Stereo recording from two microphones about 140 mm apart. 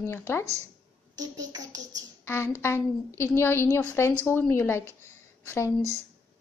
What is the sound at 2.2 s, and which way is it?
A woman's voice, 20° left (ahead or behind).